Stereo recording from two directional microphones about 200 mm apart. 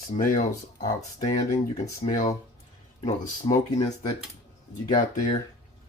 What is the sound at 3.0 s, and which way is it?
Speech, 35° left (ahead or behind).